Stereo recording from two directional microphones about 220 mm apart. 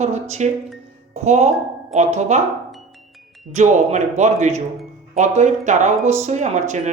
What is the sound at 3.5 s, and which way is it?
Speech, 30° right (ahead or behind).